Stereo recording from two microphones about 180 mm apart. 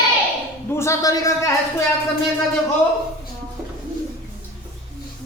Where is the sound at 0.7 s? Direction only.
15° left (ahead or behind).